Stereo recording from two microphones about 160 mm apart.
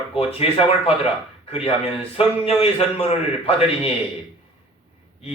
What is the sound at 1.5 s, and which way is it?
Speech, 40° left (ahead or behind).